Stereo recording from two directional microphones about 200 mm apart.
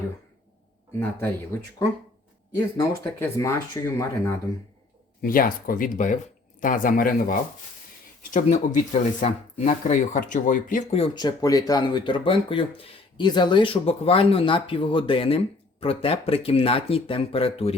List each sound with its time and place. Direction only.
1.5 s speech: 10° left (ahead or behind)
5.2 s speech: 45° left (ahead or behind)
11.0 s speech: 20° left (ahead or behind)